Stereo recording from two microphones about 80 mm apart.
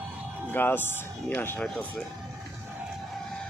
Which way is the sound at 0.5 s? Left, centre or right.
Left.